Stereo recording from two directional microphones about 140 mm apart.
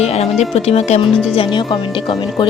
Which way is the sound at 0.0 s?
50° left (ahead or behind).